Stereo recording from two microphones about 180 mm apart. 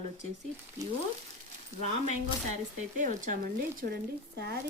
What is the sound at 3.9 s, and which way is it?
Speech, 60° right (ahead or behind).